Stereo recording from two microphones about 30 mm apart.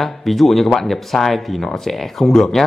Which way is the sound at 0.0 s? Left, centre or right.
Centre.